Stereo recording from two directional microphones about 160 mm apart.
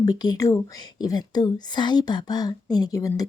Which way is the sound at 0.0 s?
25° left (ahead or behind).